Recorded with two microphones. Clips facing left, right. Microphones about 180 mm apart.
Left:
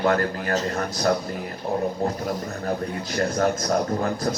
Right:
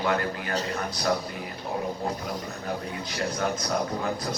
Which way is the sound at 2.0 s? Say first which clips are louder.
Left 5 dB; 45° left (ahead or behind).